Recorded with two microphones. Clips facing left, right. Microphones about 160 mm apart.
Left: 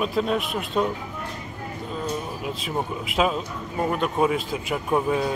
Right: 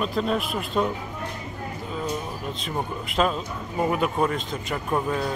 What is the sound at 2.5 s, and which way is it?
A man's voice, 5° left (ahead or behind).